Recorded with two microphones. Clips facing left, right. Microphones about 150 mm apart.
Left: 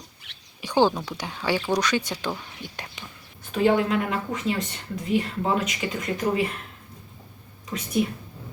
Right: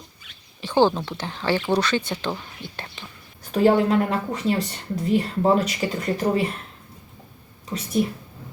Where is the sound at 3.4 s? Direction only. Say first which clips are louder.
Right 3 dB; 40° right (ahead or behind).